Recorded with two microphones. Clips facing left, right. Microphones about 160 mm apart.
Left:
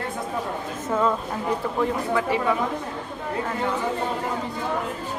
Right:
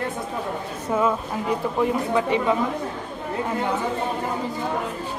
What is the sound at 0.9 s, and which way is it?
Speech, 10° right (ahead or behind).